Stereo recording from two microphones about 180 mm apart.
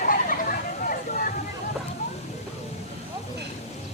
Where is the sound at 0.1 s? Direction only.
50° left (ahead or behind).